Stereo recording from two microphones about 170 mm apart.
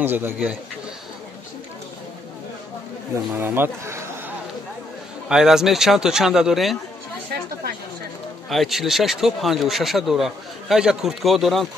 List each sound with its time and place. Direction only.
0.0 s speech: 10° right (ahead or behind)
3.3 s speech: 15° right (ahead or behind)
5.3 s speech: 5° right (ahead or behind)
8.5 s speech: centre (ahead or behind)